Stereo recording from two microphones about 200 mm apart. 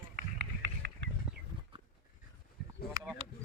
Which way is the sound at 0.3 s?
55° right (ahead or behind).